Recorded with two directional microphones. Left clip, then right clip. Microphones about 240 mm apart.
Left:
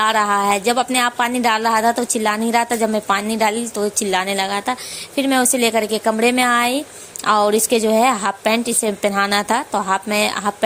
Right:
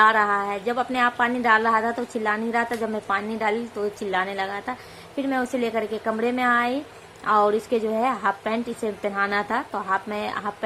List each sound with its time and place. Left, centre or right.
0.0 s a woman's voice: left